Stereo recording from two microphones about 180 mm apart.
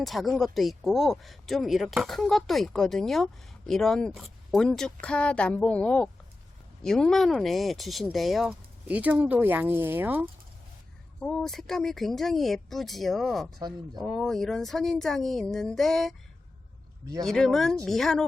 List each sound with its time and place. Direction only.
0.0 s speech: centre (ahead or behind)
11.2 s speech: 5° left (ahead or behind)
13.6 s speech: 25° right (ahead or behind)
14.0 s speech: centre (ahead or behind)
17.2 s speech: centre (ahead or behind)